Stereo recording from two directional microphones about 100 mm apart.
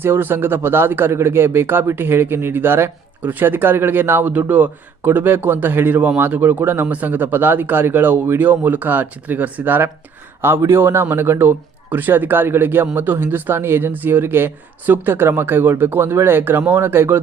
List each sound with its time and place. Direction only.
0.0 s speech: 20° right (ahead or behind)